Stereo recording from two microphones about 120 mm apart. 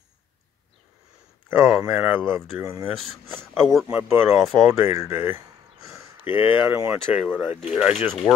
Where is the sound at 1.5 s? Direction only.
20° right (ahead or behind).